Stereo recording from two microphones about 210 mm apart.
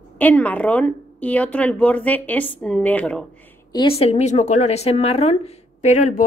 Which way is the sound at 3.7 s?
25° left (ahead or behind).